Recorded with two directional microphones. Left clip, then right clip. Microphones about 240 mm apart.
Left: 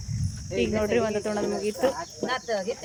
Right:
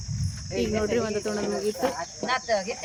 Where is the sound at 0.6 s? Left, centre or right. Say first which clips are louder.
Left 1 dB; centre.